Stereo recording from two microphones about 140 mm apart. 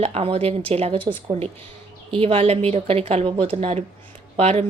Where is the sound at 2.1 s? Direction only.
45° right (ahead or behind).